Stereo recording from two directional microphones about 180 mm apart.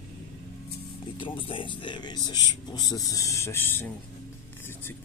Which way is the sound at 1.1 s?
30° left (ahead or behind).